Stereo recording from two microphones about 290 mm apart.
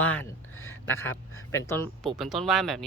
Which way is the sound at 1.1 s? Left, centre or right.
Left.